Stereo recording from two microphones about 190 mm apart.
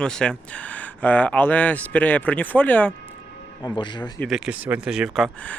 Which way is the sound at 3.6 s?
25° left (ahead or behind).